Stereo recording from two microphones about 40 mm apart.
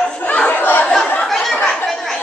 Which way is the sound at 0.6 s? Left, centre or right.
Left.